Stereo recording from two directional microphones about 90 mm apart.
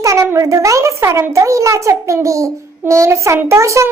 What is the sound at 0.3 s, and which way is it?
A child's voice, 35° right (ahead or behind).